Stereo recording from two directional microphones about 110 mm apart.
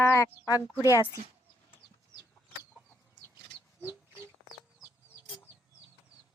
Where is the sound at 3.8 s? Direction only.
20° right (ahead or behind).